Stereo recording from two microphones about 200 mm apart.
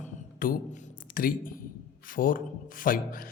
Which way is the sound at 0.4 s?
45° left (ahead or behind).